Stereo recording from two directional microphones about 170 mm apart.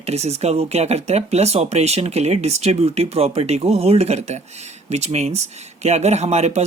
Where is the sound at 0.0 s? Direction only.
40° right (ahead or behind).